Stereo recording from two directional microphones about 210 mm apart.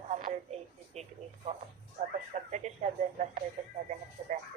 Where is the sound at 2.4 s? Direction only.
35° right (ahead or behind).